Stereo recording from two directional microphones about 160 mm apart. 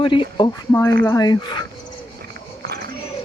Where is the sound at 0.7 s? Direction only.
20° left (ahead or behind).